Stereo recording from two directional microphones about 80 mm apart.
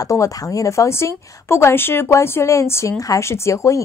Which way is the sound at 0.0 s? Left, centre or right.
Left.